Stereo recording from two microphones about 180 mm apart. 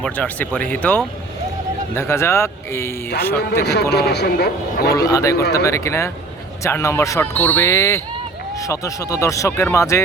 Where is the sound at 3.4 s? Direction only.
65° left (ahead or behind).